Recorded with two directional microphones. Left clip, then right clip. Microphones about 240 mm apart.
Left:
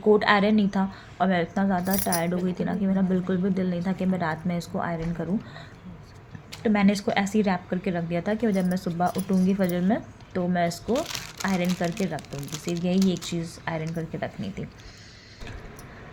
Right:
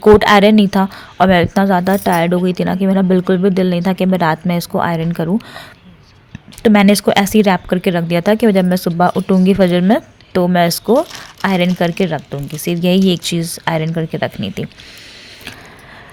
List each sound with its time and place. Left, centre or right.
0.0 s a woman's voice: right